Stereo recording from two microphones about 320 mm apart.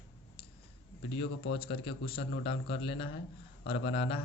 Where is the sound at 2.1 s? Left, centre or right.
Left.